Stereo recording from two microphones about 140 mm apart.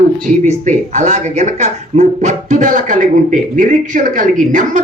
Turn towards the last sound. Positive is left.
turn(degrees=-65)  # may be behind; listen again after turning